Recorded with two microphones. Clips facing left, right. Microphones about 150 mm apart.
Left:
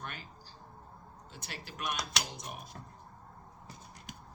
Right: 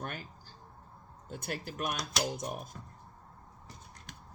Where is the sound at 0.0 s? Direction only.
45° right (ahead or behind).